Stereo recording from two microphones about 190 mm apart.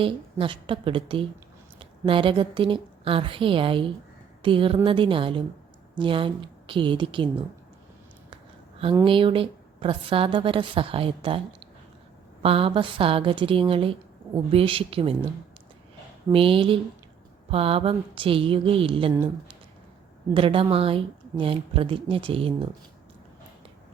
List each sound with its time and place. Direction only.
0.0 s a woman's voice: 25° right (ahead or behind)
9.0 s a woman's voice: 25° right (ahead or behind)
12.4 s a woman's voice: 30° right (ahead or behind)
16.3 s a woman's voice: 30° right (ahead or behind)
20.3 s a woman's voice: 30° right (ahead or behind)